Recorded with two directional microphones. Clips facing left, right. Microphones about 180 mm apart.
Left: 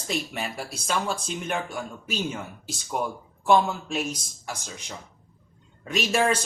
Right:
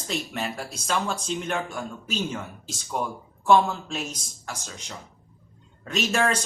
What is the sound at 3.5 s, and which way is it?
Speech, 15° left (ahead or behind).